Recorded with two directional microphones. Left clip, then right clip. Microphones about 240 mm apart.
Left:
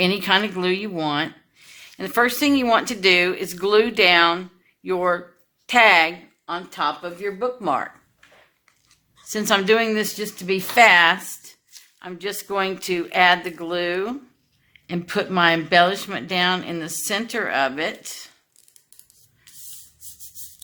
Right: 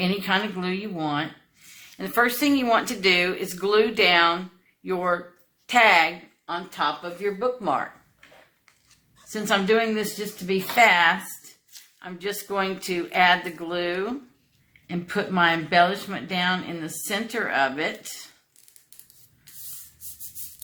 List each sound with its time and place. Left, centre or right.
0.0 s speech: left
9.3 s speech: left